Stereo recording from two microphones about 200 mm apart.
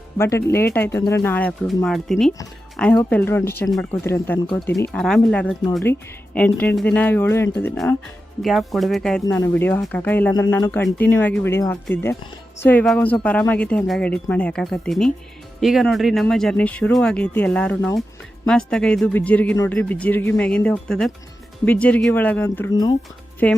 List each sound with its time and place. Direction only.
0.2 s speech: 15° left (ahead or behind)
8.4 s speech: centre (ahead or behind)
22.7 s speech: 20° left (ahead or behind)
23.4 s speech: 5° left (ahead or behind)